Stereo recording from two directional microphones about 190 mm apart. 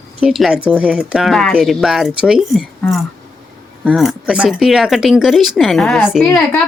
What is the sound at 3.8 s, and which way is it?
Speech, centre (ahead or behind).